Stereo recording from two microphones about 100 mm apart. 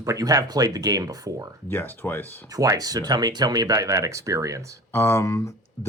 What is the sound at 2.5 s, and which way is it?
Speech, 35° right (ahead or behind).